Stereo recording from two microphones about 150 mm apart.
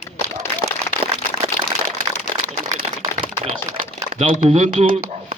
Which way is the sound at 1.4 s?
35° right (ahead or behind).